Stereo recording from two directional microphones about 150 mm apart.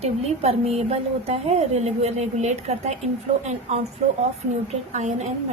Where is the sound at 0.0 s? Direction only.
45° right (ahead or behind).